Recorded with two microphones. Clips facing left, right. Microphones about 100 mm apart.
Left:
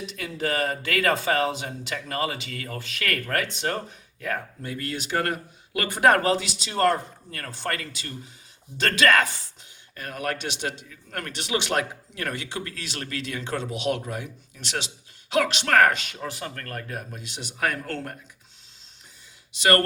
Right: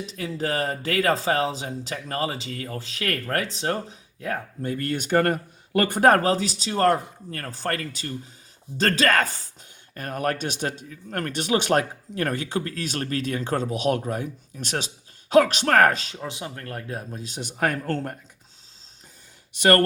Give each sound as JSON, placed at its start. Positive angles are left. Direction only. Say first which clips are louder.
{"t": 0.0, "sound": "speech", "louder": "right 1 dB", "side_deg": -35}
{"t": 4.6, "sound": "speech", "louder": "right 5 dB", "side_deg": -45}
{"t": 16.2, "sound": "speech", "louder": "even", "side_deg": -20}
{"t": 19.5, "sound": "speech", "louder": "right 2 dB", "side_deg": -45}